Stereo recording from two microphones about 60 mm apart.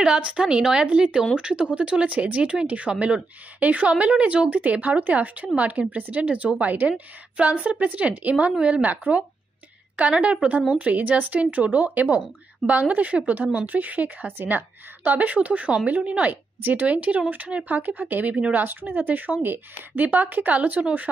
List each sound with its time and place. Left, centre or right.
0.0 s a woman's voice: centre